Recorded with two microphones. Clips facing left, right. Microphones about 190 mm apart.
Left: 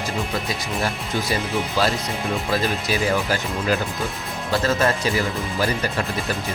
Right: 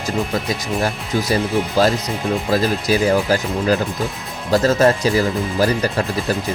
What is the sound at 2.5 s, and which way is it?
Speech, 40° right (ahead or behind).